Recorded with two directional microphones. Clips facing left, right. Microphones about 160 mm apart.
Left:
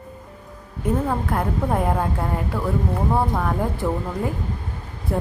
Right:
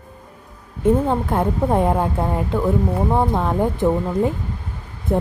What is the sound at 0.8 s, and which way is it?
Speech, 25° right (ahead or behind).